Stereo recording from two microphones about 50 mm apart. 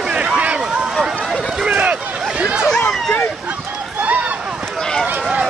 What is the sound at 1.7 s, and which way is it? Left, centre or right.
Vehicle, right.